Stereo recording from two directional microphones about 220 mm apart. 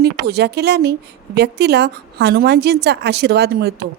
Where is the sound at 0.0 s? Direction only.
50° right (ahead or behind).